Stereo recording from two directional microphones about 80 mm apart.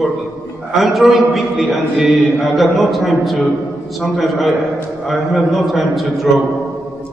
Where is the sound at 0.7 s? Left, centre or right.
Centre.